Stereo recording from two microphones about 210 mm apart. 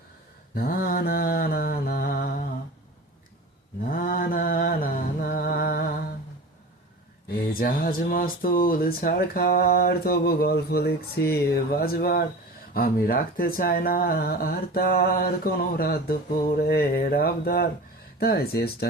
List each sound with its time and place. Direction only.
0.5 s mantra: 45° left (ahead or behind)
3.8 s mantra: 45° left (ahead or behind)
7.3 s speech: 45° left (ahead or behind)